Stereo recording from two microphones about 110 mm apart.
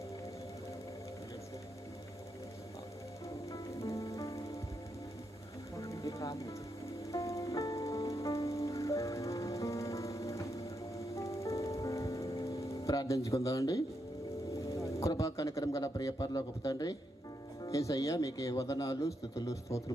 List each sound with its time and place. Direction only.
3.5 s music: 30° left (ahead or behind)
5.8 s music: 30° left (ahead or behind)
15.1 s a man's voice: 35° left (ahead or behind)